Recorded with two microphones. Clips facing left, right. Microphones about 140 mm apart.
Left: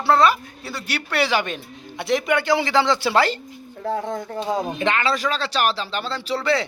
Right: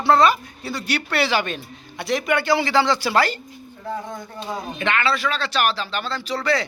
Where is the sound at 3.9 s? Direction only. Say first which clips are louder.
Left 5 dB; 65° left (ahead or behind).